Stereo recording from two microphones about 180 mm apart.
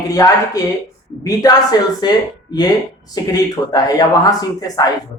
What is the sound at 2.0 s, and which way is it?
Speech, 25° left (ahead or behind).